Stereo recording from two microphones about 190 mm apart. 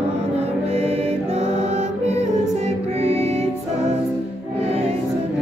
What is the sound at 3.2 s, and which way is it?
Music, 15° left (ahead or behind).